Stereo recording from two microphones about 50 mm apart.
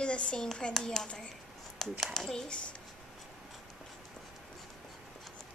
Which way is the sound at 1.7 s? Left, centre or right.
Centre.